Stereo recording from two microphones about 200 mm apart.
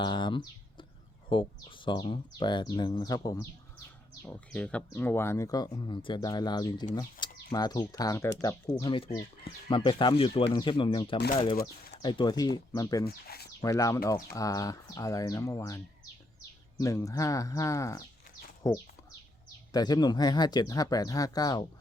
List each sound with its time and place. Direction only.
0.0 s speech: 25° left (ahead or behind)
4.3 s speech: 5° left (ahead or behind)
13.1 s speech: 50° left (ahead or behind)
13.6 s speech: 15° left (ahead or behind)